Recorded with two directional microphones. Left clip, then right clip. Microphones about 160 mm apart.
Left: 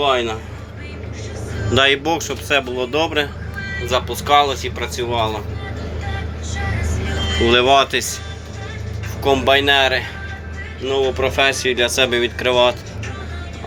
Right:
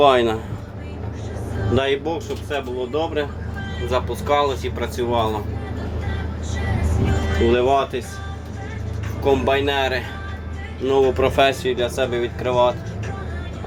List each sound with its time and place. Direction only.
0.0 s speech: 40° right (ahead or behind)
1.7 s speech: centre (ahead or behind)
2.0 s speech: 15° left (ahead or behind)
3.8 s speech: 5° right (ahead or behind); by 5.4 s 20° right (ahead or behind)
7.4 s speech: centre (ahead or behind)
9.2 s speech: 5° right (ahead or behind)
10.8 s speech: 35° right (ahead or behind)
11.6 s speech: 5° right (ahead or behind)